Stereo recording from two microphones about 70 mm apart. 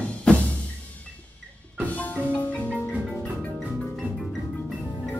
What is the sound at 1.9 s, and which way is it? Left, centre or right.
Music, left.